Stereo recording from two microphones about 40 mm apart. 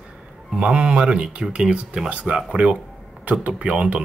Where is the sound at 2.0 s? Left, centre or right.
Right.